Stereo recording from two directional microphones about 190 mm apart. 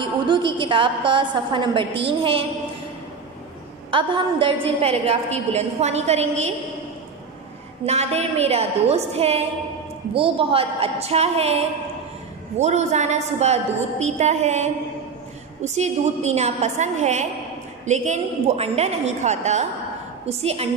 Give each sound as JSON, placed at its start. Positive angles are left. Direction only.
{"t": 0.0, "sound": "a woman's voice", "side_deg": -25}
{"t": 3.9, "sound": "a woman's voice", "side_deg": -25}
{"t": 7.8, "sound": "a woman's voice", "side_deg": -35}